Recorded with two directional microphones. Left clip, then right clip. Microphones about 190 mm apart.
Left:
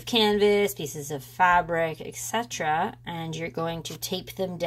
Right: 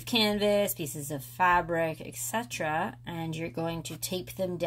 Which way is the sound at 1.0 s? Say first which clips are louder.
Left 4 dB; 10° left (ahead or behind).